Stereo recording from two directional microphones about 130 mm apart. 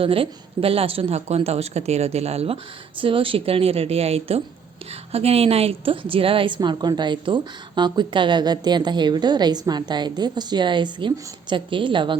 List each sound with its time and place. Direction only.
0.0 s a woman's voice: 45° right (ahead or behind)